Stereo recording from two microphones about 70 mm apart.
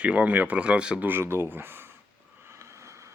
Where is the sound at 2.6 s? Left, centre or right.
Right.